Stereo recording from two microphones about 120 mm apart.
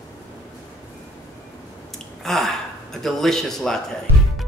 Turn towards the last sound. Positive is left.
turn(degrees=5)  # may be behind; listen again after turning